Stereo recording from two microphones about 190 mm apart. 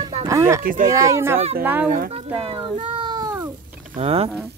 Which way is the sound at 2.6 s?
25° right (ahead or behind).